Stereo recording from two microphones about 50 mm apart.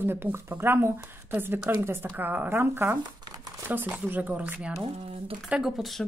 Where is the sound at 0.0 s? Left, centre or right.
Right.